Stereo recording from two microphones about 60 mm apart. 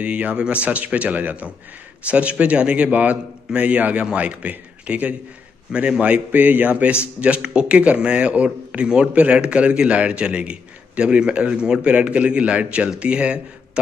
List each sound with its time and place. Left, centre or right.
0.0 s a man's voice: right